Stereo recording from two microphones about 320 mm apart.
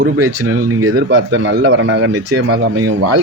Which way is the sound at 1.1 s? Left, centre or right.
Right.